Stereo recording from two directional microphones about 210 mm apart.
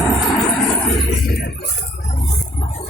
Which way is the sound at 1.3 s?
50° left (ahead or behind).